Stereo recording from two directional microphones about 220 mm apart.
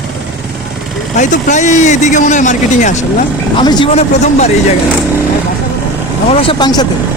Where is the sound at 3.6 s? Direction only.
20° left (ahead or behind).